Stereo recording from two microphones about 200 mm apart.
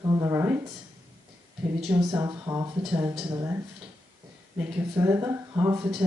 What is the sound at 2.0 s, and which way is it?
Speech, 15° right (ahead or behind).